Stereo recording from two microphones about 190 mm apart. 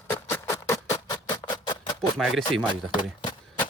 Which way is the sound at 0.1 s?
15° left (ahead or behind).